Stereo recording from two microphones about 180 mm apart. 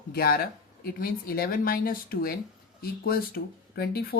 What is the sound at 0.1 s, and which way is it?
Speech, 60° left (ahead or behind).